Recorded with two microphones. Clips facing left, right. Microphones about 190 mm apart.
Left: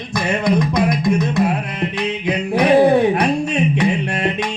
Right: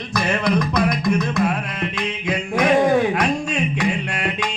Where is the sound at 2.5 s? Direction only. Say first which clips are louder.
Left 4 dB; 35° left (ahead or behind).